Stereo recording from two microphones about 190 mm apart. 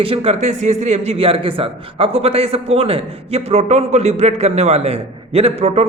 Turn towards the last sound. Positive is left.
turn(degrees=-35)  # may be behind; listen again after turning